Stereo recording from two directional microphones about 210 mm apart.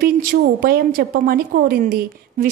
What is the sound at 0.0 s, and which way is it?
A woman's voice, 45° right (ahead or behind).